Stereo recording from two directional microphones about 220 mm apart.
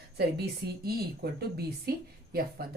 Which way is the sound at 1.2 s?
45° right (ahead or behind).